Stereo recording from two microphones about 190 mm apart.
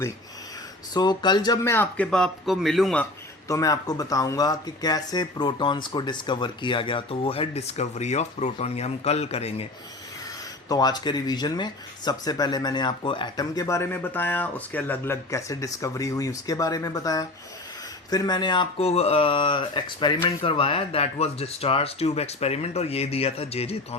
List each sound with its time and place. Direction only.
0.9 s speech: 25° left (ahead or behind); by 3.1 s 5° left (ahead or behind)
3.5 s speech: 15° left (ahead or behind); by 9.6 s 35° left (ahead or behind)
10.7 s speech: 20° left (ahead or behind)